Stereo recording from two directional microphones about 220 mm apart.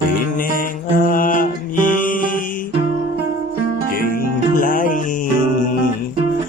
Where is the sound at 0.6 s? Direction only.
40° left (ahead or behind).